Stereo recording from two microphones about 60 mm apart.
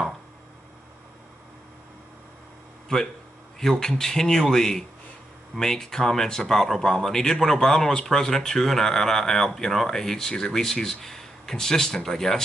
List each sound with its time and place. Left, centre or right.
2.9 s speech: centre